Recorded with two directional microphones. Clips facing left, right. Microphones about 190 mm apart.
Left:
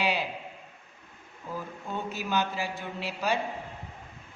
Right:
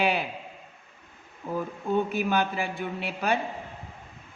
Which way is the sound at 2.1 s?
55° right (ahead or behind).